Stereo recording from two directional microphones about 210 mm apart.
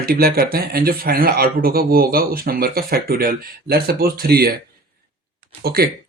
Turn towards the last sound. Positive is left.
turn(degrees=-45)  # may be behind; listen again after turning